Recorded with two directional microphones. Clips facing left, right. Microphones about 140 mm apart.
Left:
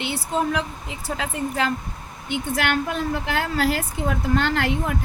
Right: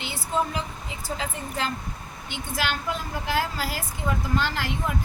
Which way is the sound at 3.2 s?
65° left (ahead or behind).